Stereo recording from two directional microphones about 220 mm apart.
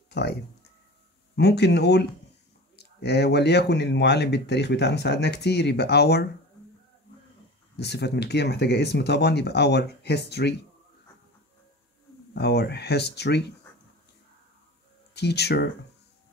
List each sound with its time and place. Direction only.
1.3 s speech: 50° left (ahead or behind)
7.7 s speech: 50° left (ahead or behind)
12.4 s speech: 50° left (ahead or behind)
15.1 s speech: 50° left (ahead or behind)